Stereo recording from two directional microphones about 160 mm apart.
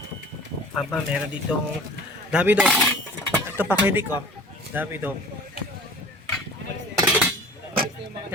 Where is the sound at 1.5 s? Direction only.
5° right (ahead or behind).